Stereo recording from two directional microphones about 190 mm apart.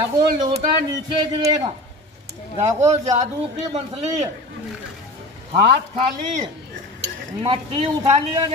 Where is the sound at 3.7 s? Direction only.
35° right (ahead or behind).